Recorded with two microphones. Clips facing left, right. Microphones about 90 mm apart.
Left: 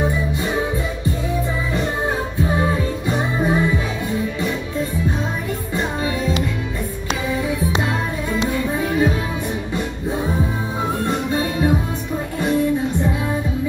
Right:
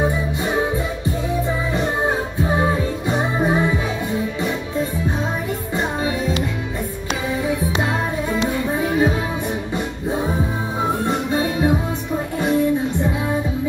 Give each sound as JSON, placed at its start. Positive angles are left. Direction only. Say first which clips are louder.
{"t": 1.7, "sound": "music", "louder": "right 1 dB", "side_deg": -20}
{"t": 7.8, "sound": "music", "louder": "right 1 dB", "side_deg": -25}
{"t": 11.1, "sound": "music", "louder": "right 1 dB", "side_deg": -20}